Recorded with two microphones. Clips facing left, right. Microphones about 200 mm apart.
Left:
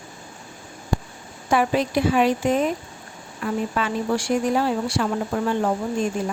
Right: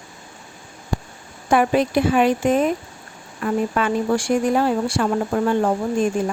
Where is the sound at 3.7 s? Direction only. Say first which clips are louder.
Right 4 dB; 50° right (ahead or behind).